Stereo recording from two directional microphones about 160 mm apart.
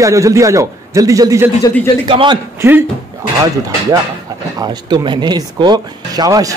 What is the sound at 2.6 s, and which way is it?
Speech, 15° right (ahead or behind).